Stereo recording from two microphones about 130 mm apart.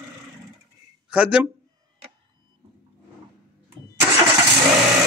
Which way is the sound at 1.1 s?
10° right (ahead or behind).